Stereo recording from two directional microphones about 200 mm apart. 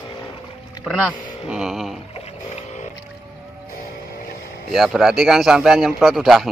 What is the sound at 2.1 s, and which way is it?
Boat, 30° left (ahead or behind).